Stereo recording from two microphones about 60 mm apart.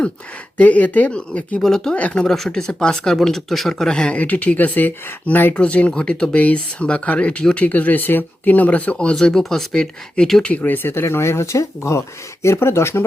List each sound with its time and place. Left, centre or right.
0.5 s speech: left
1.6 s speech: centre
2.0 s speech: left
2.2 s speech: centre; by 9.1 s left
9.1 s speech: centre
10.4 s speech: left